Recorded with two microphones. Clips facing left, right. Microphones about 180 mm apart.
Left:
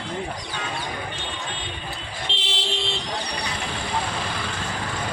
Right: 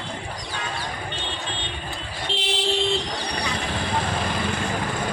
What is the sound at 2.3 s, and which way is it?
Vehicle, 40° right (ahead or behind).